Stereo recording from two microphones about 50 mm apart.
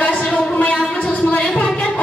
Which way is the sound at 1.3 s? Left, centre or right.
Left.